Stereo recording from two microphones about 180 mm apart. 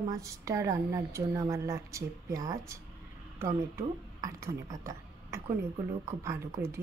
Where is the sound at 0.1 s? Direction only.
15° right (ahead or behind).